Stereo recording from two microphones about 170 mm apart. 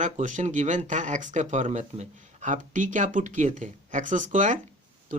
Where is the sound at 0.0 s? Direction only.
45° right (ahead or behind).